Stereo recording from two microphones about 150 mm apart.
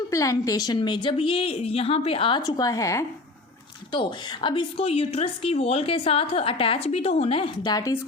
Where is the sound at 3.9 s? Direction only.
30° left (ahead or behind).